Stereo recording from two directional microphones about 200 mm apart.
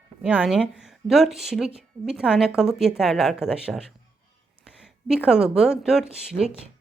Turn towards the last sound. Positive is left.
turn(degrees=-5)  # may be behind; listen again after turning